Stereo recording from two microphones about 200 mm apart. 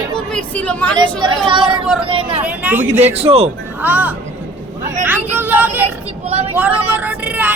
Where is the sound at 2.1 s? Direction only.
25° right (ahead or behind).